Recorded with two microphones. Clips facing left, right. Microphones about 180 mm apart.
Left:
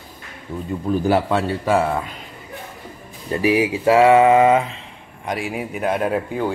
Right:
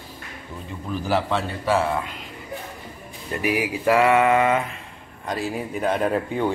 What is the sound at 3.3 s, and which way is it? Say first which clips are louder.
Speech: left 6 dB; 30° left (ahead or behind).